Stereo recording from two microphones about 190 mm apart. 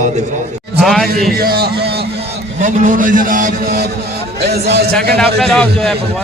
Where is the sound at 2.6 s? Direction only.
45° right (ahead or behind).